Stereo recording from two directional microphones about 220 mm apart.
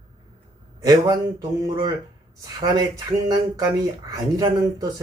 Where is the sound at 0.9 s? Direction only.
15° right (ahead or behind).